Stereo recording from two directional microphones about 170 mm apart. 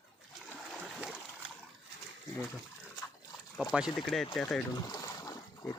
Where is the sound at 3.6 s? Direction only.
5° right (ahead or behind).